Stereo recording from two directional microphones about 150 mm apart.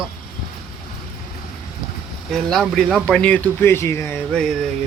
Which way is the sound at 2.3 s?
Centre (ahead or behind).